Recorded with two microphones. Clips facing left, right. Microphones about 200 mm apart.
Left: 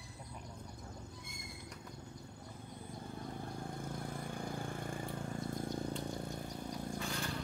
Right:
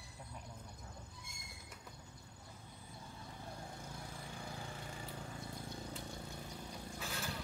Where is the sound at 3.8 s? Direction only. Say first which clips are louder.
Left 7 dB; 55° left (ahead or behind).